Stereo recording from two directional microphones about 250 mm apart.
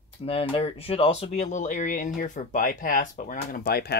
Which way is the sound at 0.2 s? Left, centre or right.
Left.